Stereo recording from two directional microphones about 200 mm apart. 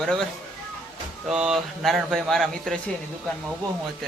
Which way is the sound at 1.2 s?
5° right (ahead or behind).